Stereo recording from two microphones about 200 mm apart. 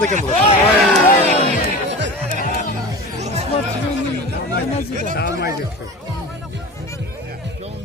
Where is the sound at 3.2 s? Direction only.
30° right (ahead or behind).